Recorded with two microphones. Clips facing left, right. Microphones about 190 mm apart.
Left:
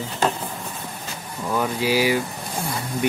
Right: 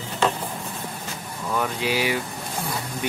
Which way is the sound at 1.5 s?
10° left (ahead or behind).